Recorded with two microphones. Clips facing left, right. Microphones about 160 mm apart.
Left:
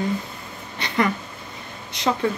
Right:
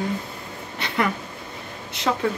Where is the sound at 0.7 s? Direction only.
5° right (ahead or behind).